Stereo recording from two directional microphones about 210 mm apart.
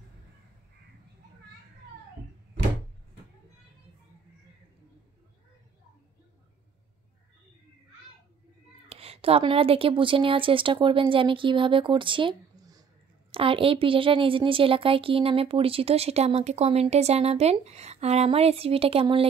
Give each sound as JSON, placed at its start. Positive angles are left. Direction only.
{"t": 8.8, "sound": "a woman's voice", "side_deg": -30}